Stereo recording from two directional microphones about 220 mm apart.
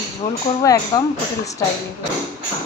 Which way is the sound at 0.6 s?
15° left (ahead or behind).